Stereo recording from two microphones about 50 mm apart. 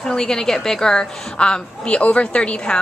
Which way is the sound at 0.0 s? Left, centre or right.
Centre.